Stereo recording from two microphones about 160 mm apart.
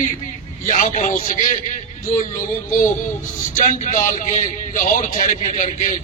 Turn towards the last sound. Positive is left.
turn(degrees=55)  # may be behind; listen again after turning